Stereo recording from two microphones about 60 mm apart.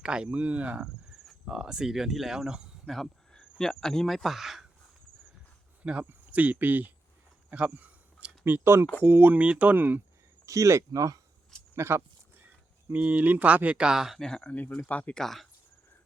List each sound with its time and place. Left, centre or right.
0.0 s speech: centre
1.3 s speech: centre
2.8 s speech: centre
5.8 s speech: centre
8.4 s speech: right
9.0 s speech: right
9.7 s speech: right
10.4 s speech: right
10.9 s speech: right
11.7 s speech: right
12.9 s speech: right; by 14.2 s centre
14.2 s speech: centre
14.5 s speech: left
15.1 s speech: centre